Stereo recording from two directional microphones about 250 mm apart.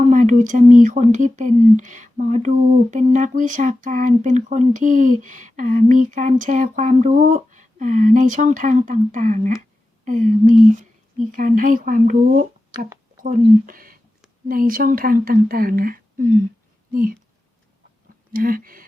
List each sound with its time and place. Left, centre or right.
0.1 s speech: right
18.3 s speech: right